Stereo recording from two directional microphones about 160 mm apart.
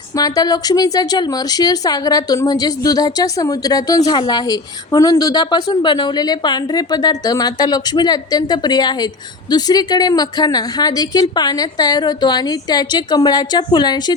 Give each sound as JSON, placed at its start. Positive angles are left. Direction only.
{"t": 0.2, "sound": "a woman's voice", "side_deg": 25}